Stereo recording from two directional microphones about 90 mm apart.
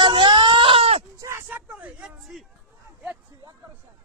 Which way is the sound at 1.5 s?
20° right (ahead or behind).